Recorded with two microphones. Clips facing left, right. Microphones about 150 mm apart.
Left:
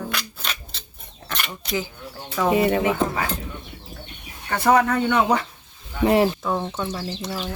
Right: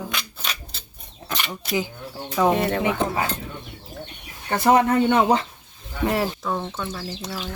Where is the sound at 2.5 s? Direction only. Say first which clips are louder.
Left 3 dB; 5° left (ahead or behind).